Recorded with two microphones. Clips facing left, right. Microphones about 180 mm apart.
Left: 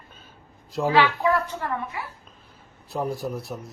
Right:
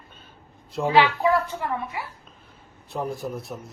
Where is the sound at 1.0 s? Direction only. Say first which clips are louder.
Right 2 dB; 15° right (ahead or behind).